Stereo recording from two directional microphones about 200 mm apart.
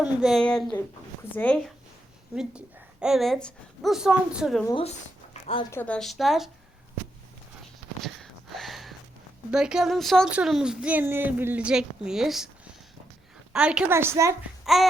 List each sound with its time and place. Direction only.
0.0 s speech: centre (ahead or behind)
2.3 s speech: 5° right (ahead or behind)
4.6 s speech: 25° left (ahead or behind)
5.3 s zipper: 25° left (ahead or behind)
5.7 s speech: 5° left (ahead or behind)
7.6 s a sound: centre (ahead or behind)
9.5 s speech: 5° right (ahead or behind)
13.5 s a woman's voice: 5° right (ahead or behind)
14.6 s babbling: centre (ahead or behind)